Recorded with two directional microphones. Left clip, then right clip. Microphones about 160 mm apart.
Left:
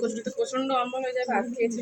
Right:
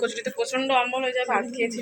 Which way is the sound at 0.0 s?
10° left (ahead or behind).